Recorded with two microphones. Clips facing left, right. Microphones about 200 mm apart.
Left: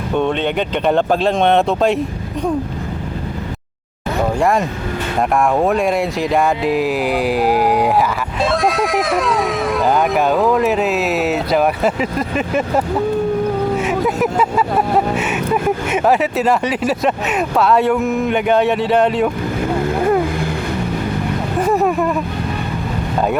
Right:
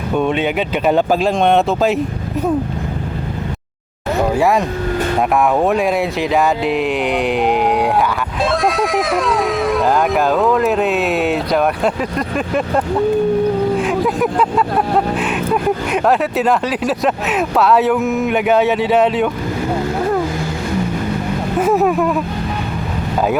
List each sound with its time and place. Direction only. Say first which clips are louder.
0.2 s speech: even; 5° right (ahead or behind)
4.4 s speech: right 1 dB; 5° right (ahead or behind)
21.6 s a sound: right 2 dB; centre (ahead or behind)